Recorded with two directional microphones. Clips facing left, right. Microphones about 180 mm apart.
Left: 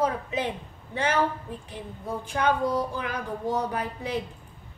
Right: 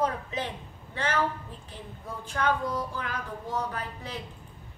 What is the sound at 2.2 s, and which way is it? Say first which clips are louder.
A woman's voice: left 3 dB; 15° left (ahead or behind).